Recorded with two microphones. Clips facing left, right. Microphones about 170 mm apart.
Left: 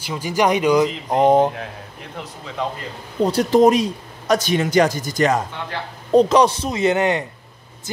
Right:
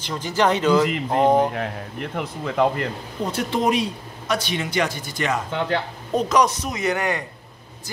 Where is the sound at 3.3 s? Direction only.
40° left (ahead or behind).